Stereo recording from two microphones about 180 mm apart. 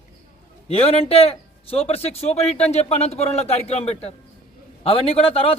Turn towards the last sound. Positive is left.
turn(degrees=30)  # may be behind; listen again after turning